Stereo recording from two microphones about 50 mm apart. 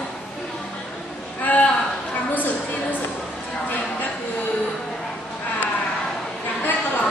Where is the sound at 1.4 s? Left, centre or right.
Left.